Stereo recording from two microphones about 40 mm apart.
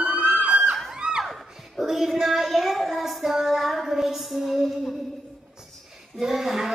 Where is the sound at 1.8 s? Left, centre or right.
Centre.